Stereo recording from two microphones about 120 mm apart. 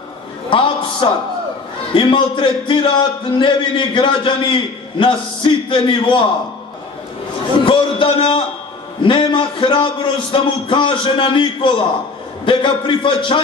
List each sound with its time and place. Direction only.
0.5 s a man's voice: 45° left (ahead or behind)
7.6 s a man's voice: 45° left (ahead or behind)